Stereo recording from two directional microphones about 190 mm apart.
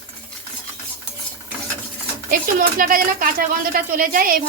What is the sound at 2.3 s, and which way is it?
Speech, 50° right (ahead or behind).